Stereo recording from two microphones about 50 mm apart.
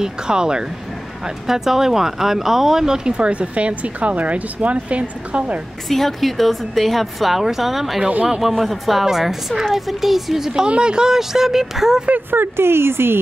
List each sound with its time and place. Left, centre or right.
0.0 s a woman's voice: centre
3.1 s speech: right
5.9 s a woman's voice: centre
12.3 s speech: right